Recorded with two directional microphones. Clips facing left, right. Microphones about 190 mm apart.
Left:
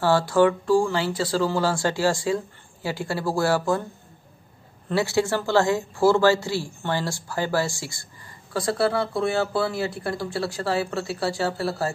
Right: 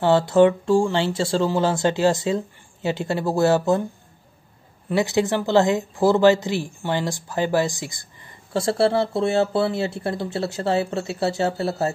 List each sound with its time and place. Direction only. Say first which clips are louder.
0.0 s speech: right 3 dB; 20° right (ahead or behind)
4.8 s speech: right 2 dB; 20° right (ahead or behind)